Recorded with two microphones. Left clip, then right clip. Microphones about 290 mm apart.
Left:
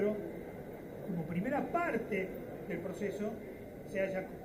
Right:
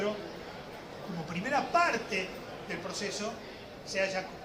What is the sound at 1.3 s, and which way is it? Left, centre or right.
A man's voice, centre.